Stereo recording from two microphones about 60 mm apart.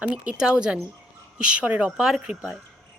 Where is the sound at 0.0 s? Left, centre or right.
Centre.